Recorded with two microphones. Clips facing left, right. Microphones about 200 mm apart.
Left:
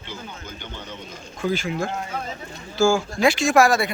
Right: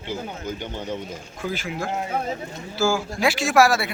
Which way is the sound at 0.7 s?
40° right (ahead or behind).